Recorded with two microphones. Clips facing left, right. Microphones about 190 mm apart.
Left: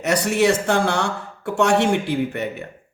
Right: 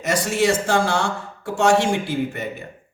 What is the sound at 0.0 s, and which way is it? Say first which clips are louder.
Speech: left 2 dB; 60° left (ahead or behind).